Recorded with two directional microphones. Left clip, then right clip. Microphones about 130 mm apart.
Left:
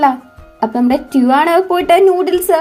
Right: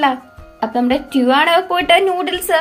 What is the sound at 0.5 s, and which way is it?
Speech, 25° left (ahead or behind).